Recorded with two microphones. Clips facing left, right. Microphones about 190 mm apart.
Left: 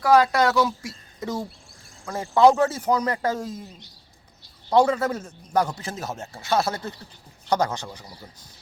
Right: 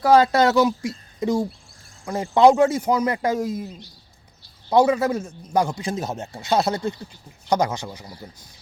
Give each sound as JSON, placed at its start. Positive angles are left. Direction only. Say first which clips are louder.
{"t": 0.0, "sound": "a man's voice", "louder": "right 3 dB", "side_deg": -25}
{"t": 4.7, "sound": "a man's voice", "louder": "right 2 dB", "side_deg": -10}